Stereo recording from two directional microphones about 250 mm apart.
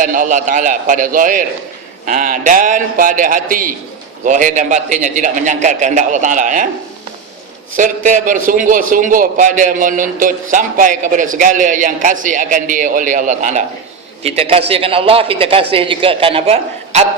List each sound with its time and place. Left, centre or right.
0.0 s a man's voice: right
7.8 s a man's voice: right